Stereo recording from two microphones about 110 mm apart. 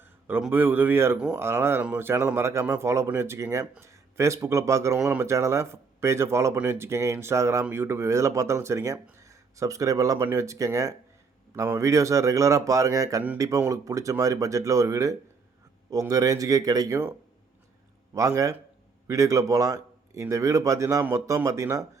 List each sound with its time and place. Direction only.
0.0 s a sound: 20° right (ahead or behind)
0.5 s speech: 15° right (ahead or behind); by 17.0 s 35° right (ahead or behind)
18.1 s speech: 30° right (ahead or behind)